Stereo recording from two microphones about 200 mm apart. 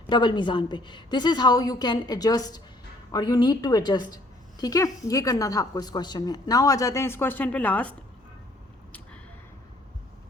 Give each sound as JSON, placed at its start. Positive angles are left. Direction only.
{"t": 0.1, "sound": "a woman's voice", "side_deg": 20}